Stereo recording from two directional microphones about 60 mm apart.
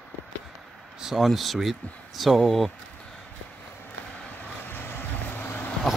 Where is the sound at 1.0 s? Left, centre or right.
Centre.